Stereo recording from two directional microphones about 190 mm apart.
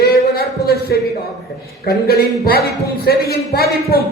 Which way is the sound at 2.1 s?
55° left (ahead or behind).